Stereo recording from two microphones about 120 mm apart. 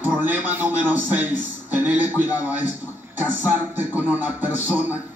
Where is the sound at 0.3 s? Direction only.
15° right (ahead or behind).